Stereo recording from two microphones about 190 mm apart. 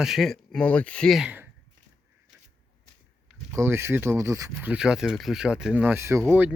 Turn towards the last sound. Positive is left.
turn(degrees=-10)  # may be behind; listen again after turning